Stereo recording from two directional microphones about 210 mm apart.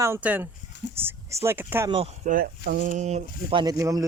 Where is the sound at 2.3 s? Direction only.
45° right (ahead or behind); by 4.0 s 15° right (ahead or behind).